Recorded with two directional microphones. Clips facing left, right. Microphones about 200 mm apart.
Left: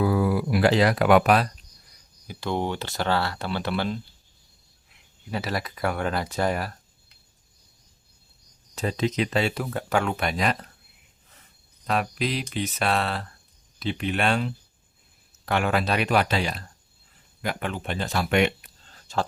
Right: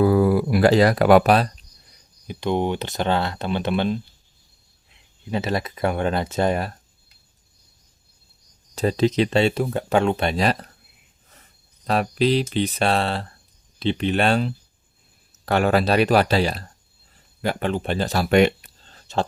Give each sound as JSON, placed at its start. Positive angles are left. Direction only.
{"t": 0.0, "sound": "speech", "side_deg": -45}
{"t": 2.2, "sound": "speech", "side_deg": -20}
{"t": 5.3, "sound": "speech", "side_deg": -25}
{"t": 8.7, "sound": "speech", "side_deg": -35}
{"t": 11.9, "sound": "speech", "side_deg": -30}
{"t": 19.1, "sound": "speech", "side_deg": -25}